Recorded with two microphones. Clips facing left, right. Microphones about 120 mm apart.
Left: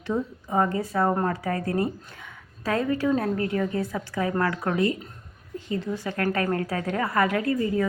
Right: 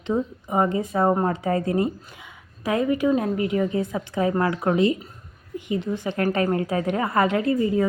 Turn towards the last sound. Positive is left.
turn(degrees=-25)  # may be behind; listen again after turning